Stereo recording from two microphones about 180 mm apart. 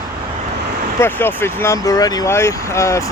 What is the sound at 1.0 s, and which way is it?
Speech, 10° left (ahead or behind).